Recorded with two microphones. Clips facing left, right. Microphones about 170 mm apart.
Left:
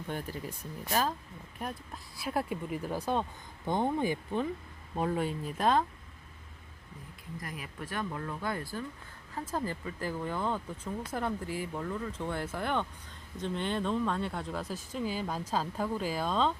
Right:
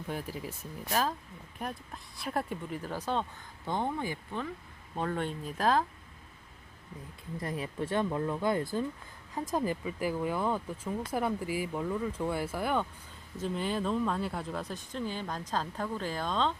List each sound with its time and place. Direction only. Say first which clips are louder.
0.1 s speech: even; 5° right (ahead or behind)
7.3 s speech: right 7 dB; 30° right (ahead or behind); by 16.6 s 5° left (ahead or behind)